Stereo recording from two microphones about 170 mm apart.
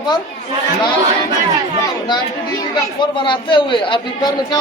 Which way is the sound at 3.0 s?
30° left (ahead or behind).